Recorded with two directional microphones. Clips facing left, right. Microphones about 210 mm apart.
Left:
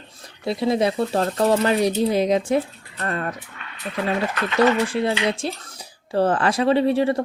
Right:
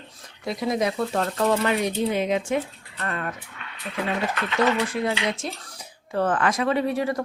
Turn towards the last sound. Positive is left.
turn(degrees=30)  # may be behind; listen again after turning